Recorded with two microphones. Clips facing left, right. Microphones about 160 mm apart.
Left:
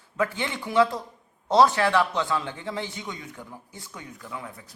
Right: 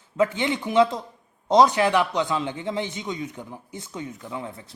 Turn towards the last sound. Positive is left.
turn(degrees=-25)  # may be behind; listen again after turning